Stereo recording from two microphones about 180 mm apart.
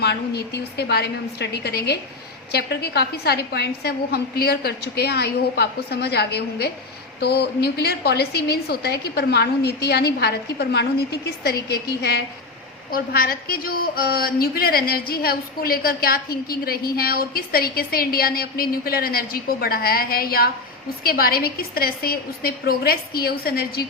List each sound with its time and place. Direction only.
0.0 s a woman's voice: 65° left (ahead or behind)
12.9 s a woman's voice: 55° left (ahead or behind)